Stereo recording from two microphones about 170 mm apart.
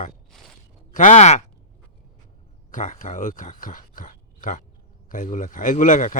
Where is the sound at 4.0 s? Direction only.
50° left (ahead or behind).